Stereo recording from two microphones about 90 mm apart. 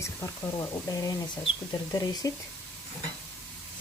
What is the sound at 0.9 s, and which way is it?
Speech, 45° left (ahead or behind).